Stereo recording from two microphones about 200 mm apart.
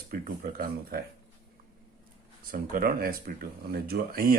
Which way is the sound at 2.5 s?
45° right (ahead or behind).